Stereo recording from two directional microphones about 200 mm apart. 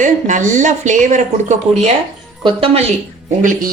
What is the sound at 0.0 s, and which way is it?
Speech, 40° right (ahead or behind).